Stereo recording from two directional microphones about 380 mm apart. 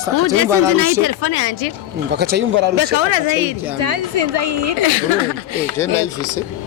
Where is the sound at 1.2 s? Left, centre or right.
Left.